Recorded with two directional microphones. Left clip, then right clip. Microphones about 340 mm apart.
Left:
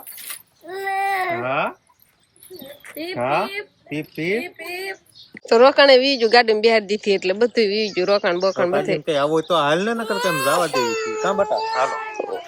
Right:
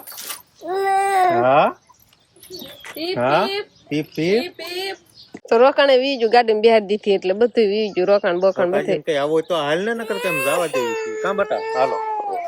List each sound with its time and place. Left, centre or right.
0.7 s baby cry: centre
2.9 s a woman's voice: centre
11.5 s speech: right